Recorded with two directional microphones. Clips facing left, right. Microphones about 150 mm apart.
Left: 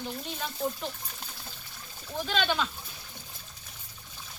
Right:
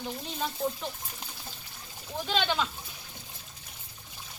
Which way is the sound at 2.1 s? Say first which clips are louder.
Even; 15° right (ahead or behind).